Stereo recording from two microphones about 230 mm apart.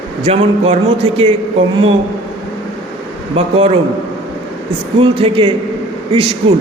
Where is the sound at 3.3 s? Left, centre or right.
Right.